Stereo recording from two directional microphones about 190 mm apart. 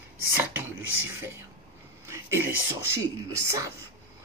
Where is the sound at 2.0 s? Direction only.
15° right (ahead or behind).